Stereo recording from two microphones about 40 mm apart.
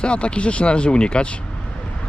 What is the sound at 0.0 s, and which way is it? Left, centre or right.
Speech, left.